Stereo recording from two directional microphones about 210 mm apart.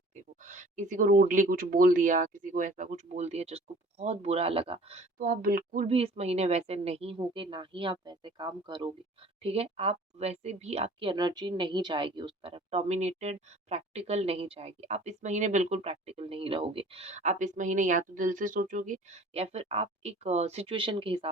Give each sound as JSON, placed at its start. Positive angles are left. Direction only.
{"t": 0.2, "sound": "speech", "side_deg": -35}